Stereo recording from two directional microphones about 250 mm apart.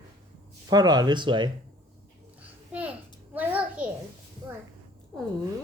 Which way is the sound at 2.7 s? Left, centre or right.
Centre.